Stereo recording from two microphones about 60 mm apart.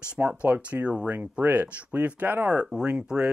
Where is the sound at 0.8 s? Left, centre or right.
Centre.